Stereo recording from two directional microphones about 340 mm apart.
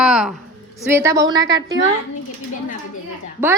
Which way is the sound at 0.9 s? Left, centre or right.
Centre.